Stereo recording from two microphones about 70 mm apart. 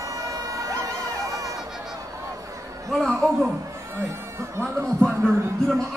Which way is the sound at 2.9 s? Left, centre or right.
Centre.